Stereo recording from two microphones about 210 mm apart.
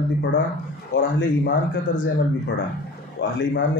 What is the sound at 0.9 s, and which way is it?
Speech, 60° left (ahead or behind).